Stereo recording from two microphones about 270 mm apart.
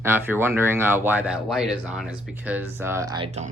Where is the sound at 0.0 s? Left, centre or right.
Centre.